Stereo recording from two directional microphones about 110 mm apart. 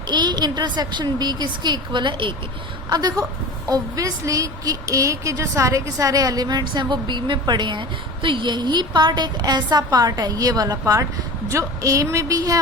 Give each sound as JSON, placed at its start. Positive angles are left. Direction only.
{"t": 0.1, "sound": "a woman's voice", "side_deg": -40}
{"t": 2.9, "sound": "a woman's voice", "side_deg": -35}